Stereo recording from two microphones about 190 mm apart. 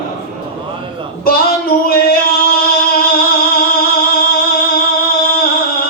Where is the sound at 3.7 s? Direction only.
50° left (ahead or behind).